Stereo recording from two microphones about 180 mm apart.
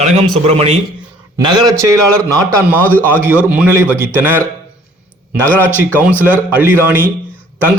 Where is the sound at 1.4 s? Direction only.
25° right (ahead or behind).